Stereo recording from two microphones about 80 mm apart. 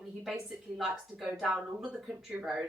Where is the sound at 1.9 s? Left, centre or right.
Centre.